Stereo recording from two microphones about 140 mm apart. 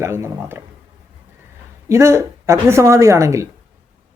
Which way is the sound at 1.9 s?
20° right (ahead or behind).